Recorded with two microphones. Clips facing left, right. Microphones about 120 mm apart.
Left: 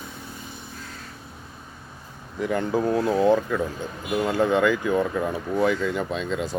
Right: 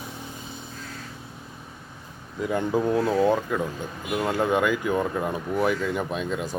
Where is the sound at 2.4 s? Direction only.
15° right (ahead or behind).